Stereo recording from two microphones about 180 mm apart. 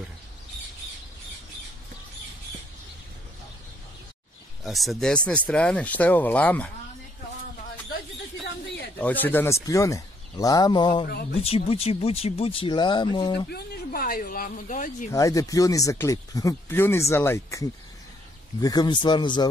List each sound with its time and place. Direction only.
4.6 s speech: centre (ahead or behind)
8.9 s speech: 10° left (ahead or behind); by 13.5 s 25° left (ahead or behind)
13.5 s speech: 60° left (ahead or behind)
15.0 s speech: 15° left (ahead or behind)